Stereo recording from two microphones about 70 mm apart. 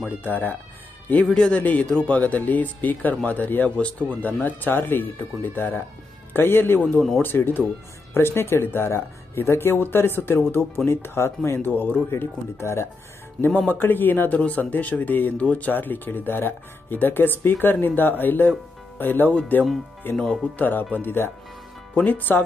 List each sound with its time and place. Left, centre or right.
0.2 s speech: left
1.3 s a man's voice: centre; by 12.8 s left
13.6 s speech: left